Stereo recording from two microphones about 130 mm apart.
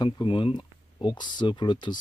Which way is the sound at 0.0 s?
40° left (ahead or behind).